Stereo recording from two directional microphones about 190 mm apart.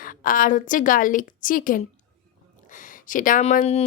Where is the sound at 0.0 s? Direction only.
45° left (ahead or behind).